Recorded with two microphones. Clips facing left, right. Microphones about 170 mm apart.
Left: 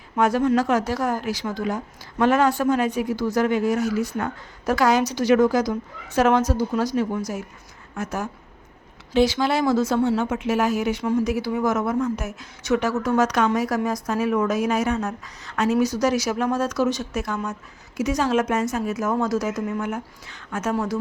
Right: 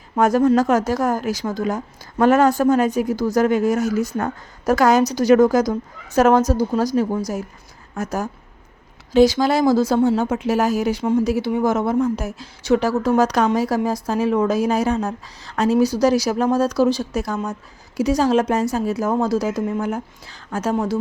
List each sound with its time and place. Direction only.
0.2 s a woman's voice: 45° right (ahead or behind)